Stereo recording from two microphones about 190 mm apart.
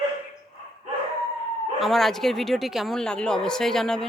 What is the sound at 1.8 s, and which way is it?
A man's voice, centre (ahead or behind).